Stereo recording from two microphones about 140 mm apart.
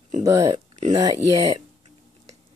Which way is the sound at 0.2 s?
25° right (ahead or behind).